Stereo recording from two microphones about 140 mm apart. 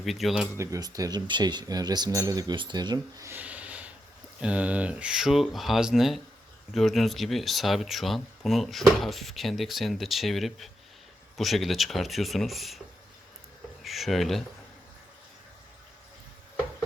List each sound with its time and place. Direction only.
0.0 s speech: centre (ahead or behind)
0.5 s speech: 20° right (ahead or behind)
3.2 s a sound: 10° right (ahead or behind)
4.4 s speech: 10° right (ahead or behind)
13.8 s speech: centre (ahead or behind)